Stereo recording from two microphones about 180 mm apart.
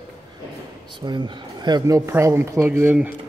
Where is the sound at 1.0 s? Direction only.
25° right (ahead or behind).